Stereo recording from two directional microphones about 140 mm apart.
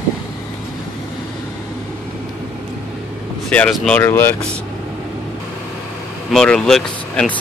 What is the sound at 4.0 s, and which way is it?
Speech, 15° left (ahead or behind).